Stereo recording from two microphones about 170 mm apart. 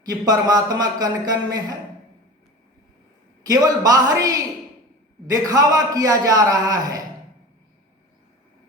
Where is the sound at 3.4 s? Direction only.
20° right (ahead or behind).